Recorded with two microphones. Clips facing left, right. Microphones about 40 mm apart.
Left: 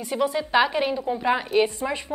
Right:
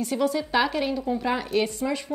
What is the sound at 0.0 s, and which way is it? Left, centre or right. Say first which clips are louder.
A woman's voice: even; centre.